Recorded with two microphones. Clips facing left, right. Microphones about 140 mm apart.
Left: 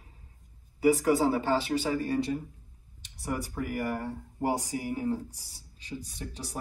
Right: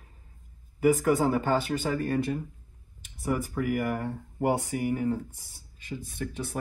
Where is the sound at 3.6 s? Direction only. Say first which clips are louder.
Right 2 dB; 60° right (ahead or behind).